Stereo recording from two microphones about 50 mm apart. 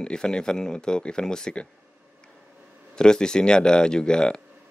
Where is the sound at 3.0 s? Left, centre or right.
Centre.